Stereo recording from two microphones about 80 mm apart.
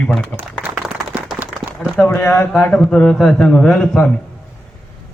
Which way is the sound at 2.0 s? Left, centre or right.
Left.